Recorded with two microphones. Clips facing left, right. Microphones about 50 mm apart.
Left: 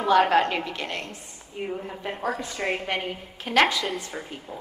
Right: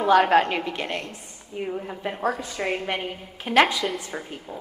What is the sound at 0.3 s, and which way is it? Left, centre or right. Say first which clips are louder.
Speech: right 2 dB; right.